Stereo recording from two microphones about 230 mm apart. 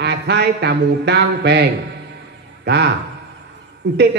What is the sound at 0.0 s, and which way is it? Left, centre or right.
A man's voice, right.